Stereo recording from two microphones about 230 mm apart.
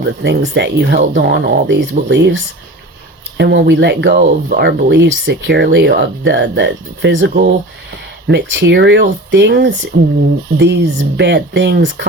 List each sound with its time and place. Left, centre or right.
0.0 s speech: right